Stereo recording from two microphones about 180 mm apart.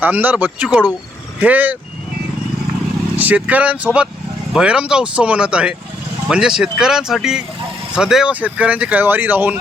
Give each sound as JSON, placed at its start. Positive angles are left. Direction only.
{"t": 0.0, "sound": "speech", "side_deg": -10}
{"t": 3.2, "sound": "speech", "side_deg": -10}